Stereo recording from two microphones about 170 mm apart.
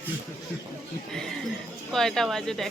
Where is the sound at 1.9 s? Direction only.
Centre (ahead or behind).